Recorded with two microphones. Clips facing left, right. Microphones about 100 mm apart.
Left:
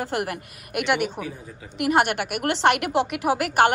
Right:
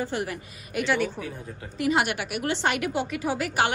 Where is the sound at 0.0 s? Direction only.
70° left (ahead or behind).